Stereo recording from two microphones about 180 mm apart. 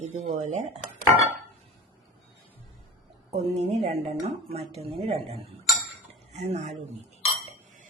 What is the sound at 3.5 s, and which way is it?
Speech, 35° right (ahead or behind).